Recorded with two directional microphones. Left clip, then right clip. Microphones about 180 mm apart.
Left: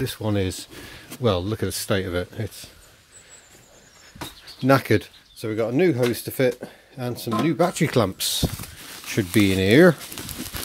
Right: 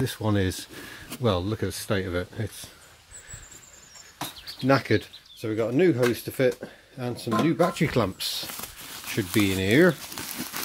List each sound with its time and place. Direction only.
0.0 s speech: centre (ahead or behind)
4.6 s speech: 30° left (ahead or behind)
10.1 s a sound: centre (ahead or behind)